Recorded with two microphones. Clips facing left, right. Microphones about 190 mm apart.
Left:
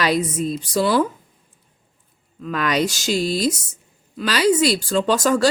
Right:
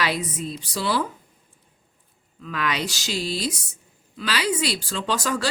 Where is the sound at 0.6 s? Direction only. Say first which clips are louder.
Left 7 dB; 45° left (ahead or behind).